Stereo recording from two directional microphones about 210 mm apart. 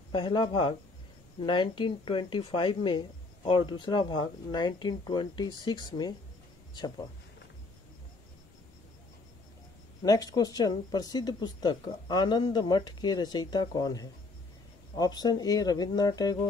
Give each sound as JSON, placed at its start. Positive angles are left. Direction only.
{"t": 0.1, "sound": "speech", "side_deg": 25}
{"t": 10.0, "sound": "speech", "side_deg": 15}